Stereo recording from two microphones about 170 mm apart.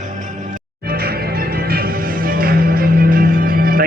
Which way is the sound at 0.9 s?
65° right (ahead or behind).